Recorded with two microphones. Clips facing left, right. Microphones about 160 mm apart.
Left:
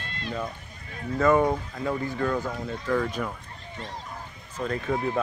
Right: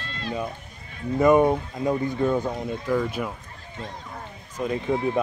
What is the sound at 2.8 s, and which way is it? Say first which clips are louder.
Speech: right 1 dB; 10° right (ahead or behind).